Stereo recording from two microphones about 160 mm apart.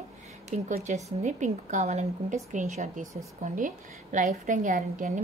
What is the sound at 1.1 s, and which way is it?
A woman's voice, 45° right (ahead or behind).